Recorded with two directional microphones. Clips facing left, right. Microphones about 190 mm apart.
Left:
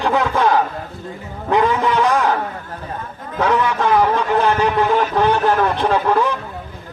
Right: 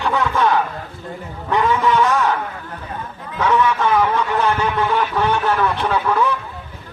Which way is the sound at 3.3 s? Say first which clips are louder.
Even; 35° left (ahead or behind).